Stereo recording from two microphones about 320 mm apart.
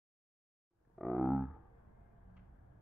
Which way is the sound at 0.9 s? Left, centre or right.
Centre.